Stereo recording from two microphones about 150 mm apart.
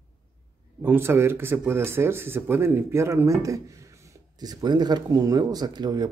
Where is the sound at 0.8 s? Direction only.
15° right (ahead or behind).